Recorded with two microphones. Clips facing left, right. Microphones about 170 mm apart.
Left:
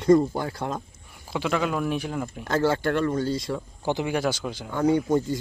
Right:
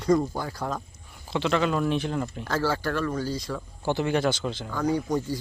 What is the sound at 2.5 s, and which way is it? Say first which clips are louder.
Speech: left 5 dB; 20° left (ahead or behind).